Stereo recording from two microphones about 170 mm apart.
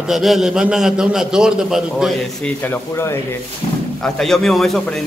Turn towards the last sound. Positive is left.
turn(degrees=0)  # may be behind; listen again after turning